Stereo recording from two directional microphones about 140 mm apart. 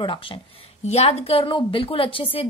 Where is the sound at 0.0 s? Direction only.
40° left (ahead or behind).